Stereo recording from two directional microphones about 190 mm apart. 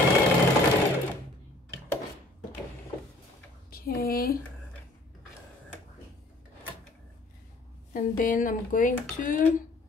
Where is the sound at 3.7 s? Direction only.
50° left (ahead or behind).